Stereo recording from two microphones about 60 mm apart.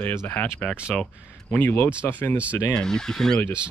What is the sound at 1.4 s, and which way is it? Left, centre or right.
Speech, left.